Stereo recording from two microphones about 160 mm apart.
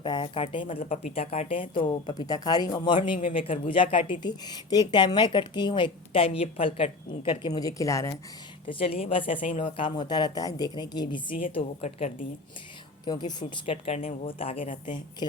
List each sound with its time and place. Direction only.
0.0 s speech: 30° left (ahead or behind)
0.8 s a woman's voice: 50° left (ahead or behind)
1.1 s speech: 40° left (ahead or behind); by 8.2 s 20° left (ahead or behind)
8.6 s speech: 35° left (ahead or behind)
11.5 s a woman's voice: 45° left (ahead or behind)
13.1 s speech: 25° left (ahead or behind)
13.7 s speech: 40° left (ahead or behind)